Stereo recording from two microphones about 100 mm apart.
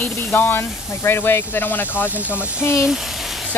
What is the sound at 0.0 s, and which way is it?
Speech, 20° left (ahead or behind).